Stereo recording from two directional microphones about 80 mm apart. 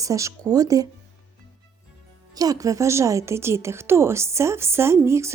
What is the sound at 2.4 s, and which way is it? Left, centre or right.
Speech, right.